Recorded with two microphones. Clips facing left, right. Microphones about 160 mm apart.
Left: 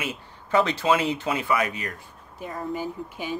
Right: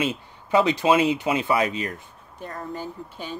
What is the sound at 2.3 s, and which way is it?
Speech, 5° left (ahead or behind).